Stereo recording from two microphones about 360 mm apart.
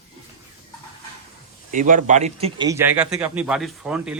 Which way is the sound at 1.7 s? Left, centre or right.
Right.